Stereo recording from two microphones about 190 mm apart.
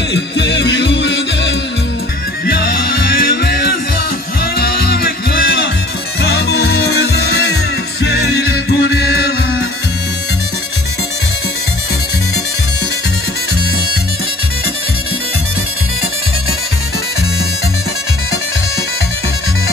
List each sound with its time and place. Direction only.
0.1 s music: 65° left (ahead or behind)
2.4 s music: 55° left (ahead or behind)